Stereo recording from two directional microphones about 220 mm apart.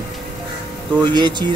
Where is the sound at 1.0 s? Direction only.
20° right (ahead or behind).